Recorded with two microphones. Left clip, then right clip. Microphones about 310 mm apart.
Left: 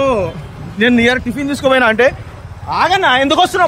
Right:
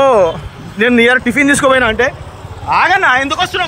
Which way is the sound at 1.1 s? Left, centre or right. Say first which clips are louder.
Right 8 dB; right.